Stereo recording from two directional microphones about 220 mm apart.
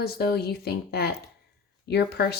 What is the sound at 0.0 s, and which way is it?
Speech, 45° left (ahead or behind).